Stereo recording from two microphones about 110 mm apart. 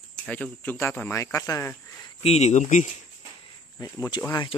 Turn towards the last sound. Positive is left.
turn(degrees=35)  # may be behind; listen again after turning